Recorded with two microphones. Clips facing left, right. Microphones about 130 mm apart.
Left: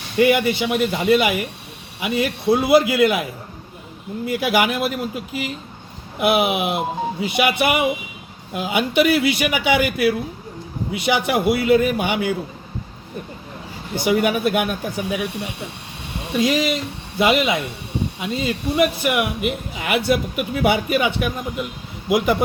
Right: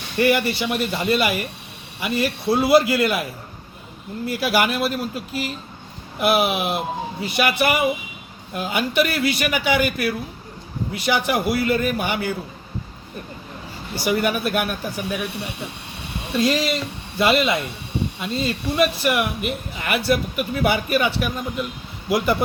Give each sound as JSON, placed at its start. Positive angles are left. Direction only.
{"t": 0.2, "sound": "speech", "side_deg": 15}
{"t": 4.3, "sound": "speech", "side_deg": 20}
{"t": 13.9, "sound": "speech", "side_deg": 20}
{"t": 16.3, "sound": "speech", "side_deg": 15}